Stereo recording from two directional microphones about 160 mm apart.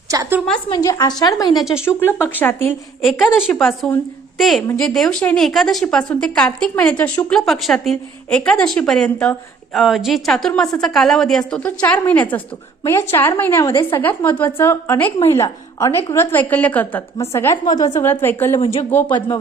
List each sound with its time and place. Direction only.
0.1 s a woman's voice: 20° right (ahead or behind)
0.7 s a woman's voice: 20° left (ahead or behind)
3.1 s a woman's voice: centre (ahead or behind); by 18.0 s 25° left (ahead or behind)
18.0 s a woman's voice: 10° left (ahead or behind)
18.6 s speech: 35° left (ahead or behind)
18.9 s a woman's voice: 10° left (ahead or behind)